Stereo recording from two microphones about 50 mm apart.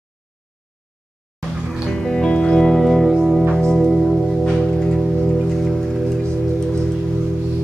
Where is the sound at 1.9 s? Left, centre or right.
Centre.